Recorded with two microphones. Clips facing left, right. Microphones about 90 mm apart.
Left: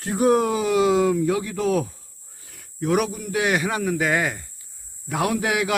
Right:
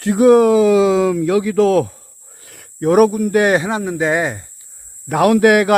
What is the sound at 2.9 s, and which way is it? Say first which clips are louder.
Speech: right 11 dB; 50° right (ahead or behind).